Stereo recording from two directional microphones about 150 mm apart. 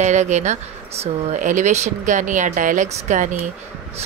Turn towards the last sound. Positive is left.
turn(degrees=-55)  # may be behind; listen again after turning